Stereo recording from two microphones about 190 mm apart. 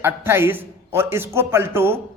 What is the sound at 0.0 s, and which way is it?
A man's voice, 10° right (ahead or behind).